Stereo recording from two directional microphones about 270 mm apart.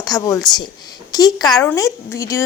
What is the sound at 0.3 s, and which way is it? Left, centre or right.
Speech, centre.